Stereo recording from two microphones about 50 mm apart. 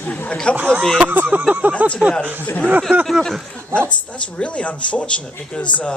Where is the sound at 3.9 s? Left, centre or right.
Left.